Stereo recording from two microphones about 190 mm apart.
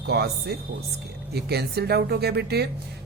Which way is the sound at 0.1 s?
60° right (ahead or behind).